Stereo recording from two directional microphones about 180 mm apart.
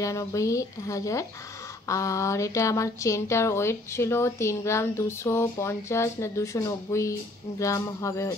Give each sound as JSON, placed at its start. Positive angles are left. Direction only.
{"t": 0.0, "sound": "speech", "side_deg": 15}